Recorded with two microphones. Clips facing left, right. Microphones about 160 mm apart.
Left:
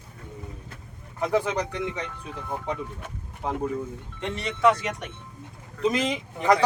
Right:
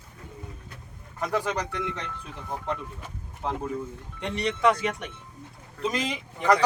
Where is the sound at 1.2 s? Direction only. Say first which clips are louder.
Left 3 dB; 10° left (ahead or behind).